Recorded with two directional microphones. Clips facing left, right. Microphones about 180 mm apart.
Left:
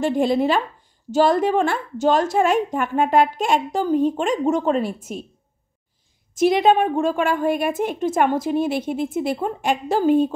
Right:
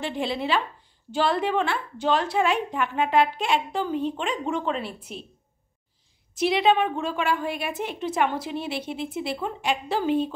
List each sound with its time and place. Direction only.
0.0 s a woman's voice: 45° left (ahead or behind)
6.3 s a woman's voice: 45° left (ahead or behind)